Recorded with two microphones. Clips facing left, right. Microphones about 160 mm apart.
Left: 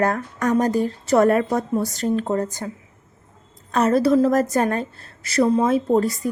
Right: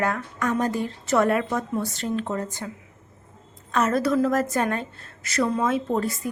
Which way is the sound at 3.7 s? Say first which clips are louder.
Left 5 dB; 35° left (ahead or behind).